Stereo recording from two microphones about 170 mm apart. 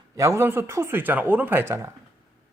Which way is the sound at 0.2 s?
15° right (ahead or behind).